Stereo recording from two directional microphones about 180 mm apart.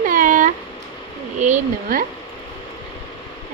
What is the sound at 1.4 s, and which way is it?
Speech, 40° right (ahead or behind).